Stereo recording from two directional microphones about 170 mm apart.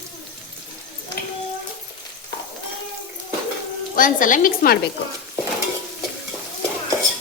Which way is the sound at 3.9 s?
55° left (ahead or behind).